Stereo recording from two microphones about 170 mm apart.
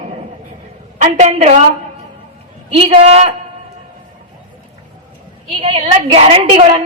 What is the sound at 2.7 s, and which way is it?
Speech, 35° right (ahead or behind).